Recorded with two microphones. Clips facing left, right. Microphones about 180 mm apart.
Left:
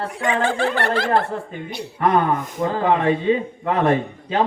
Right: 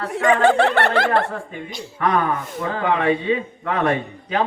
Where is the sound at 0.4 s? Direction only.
65° right (ahead or behind).